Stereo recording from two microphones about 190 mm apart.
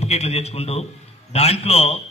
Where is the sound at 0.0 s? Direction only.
35° left (ahead or behind).